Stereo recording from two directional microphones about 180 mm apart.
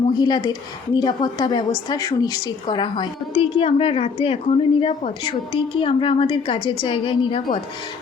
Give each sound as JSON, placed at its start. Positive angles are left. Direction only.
{"t": 0.1, "sound": "a woman's voice", "side_deg": 25}